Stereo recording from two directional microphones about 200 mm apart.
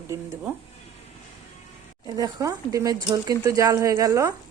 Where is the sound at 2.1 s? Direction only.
20° right (ahead or behind).